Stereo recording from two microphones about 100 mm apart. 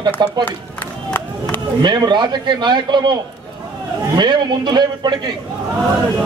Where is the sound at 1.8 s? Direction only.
45° right (ahead or behind).